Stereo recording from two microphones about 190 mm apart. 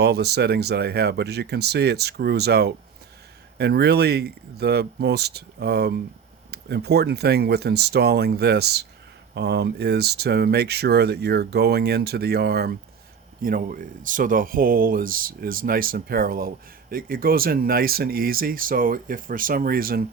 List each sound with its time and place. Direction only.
0.0 s speech: 60° right (ahead or behind)